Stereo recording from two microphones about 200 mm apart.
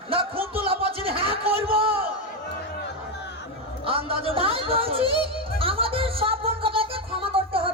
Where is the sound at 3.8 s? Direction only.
30° right (ahead or behind).